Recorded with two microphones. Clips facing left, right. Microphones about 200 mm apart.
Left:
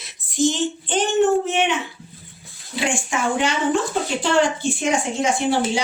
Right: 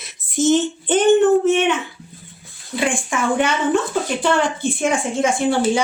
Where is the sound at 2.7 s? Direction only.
55° right (ahead or behind).